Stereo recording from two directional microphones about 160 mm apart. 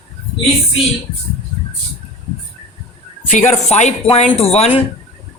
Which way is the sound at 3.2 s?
50° left (ahead or behind).